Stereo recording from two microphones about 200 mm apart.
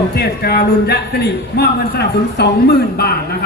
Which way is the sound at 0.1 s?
50° left (ahead or behind).